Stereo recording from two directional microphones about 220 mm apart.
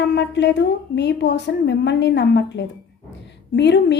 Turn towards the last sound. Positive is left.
turn(degrees=50)  # may be behind; listen again after turning